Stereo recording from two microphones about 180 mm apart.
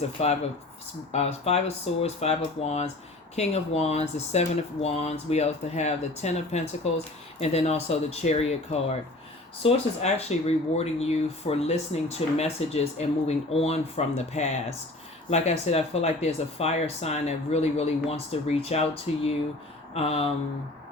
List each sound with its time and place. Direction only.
0.0 s speech: 35° left (ahead or behind)